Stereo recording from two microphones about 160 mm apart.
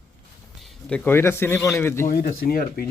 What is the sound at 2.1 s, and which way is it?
Speech, 65° left (ahead or behind).